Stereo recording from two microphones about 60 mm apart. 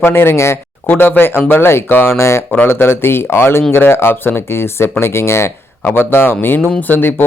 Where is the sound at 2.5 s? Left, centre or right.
Left.